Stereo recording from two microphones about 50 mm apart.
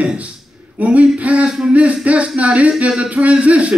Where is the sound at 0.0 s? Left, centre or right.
Right.